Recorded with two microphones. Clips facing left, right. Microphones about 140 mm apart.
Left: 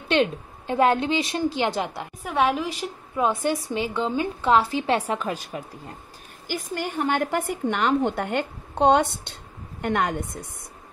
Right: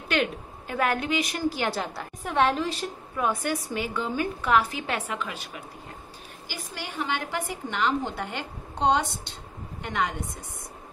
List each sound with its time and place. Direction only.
0.1 s a woman's voice: 25° left (ahead or behind)
2.2 s a woman's voice: 10° left (ahead or behind)
3.7 s a woman's voice: 25° left (ahead or behind)
6.4 s a woman's voice: 50° left (ahead or behind)